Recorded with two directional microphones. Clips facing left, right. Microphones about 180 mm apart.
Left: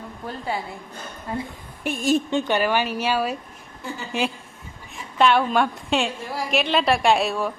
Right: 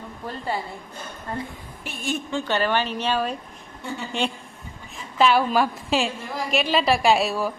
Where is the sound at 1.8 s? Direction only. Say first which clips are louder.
Left 8 dB; 45° left (ahead or behind).